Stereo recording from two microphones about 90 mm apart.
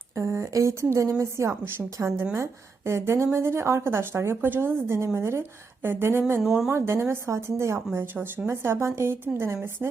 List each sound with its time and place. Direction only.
0.2 s a woman's voice: 35° right (ahead or behind)
6.4 s speech: 5° right (ahead or behind)
6.7 s a woman's voice: 30° right (ahead or behind)